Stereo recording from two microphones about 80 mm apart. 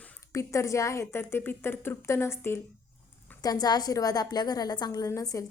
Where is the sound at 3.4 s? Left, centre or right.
Left.